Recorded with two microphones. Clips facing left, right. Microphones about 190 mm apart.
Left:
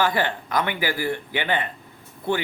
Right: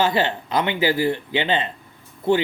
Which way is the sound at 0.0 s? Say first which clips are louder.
Right 3 dB; 25° right (ahead or behind).